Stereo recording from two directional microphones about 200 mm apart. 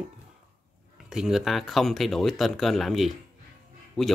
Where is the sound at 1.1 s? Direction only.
5° right (ahead or behind).